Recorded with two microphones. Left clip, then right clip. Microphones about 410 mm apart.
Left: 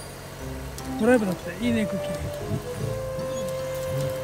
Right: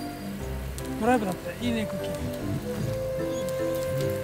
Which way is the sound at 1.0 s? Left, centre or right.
Centre.